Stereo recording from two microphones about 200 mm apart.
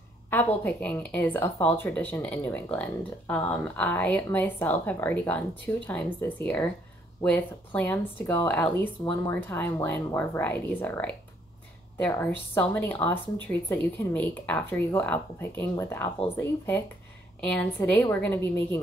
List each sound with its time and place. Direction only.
0.3 s speech: 10° left (ahead or behind)